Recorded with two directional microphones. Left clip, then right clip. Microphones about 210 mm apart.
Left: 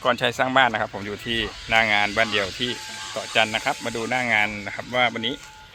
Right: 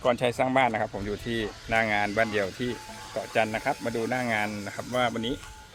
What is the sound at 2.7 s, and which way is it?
Speech, 45° right (ahead or behind).